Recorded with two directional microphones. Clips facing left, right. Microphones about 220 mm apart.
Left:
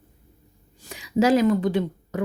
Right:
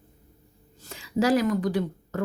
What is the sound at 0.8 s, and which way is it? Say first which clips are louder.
Speech: left 4 dB; 15° left (ahead or behind).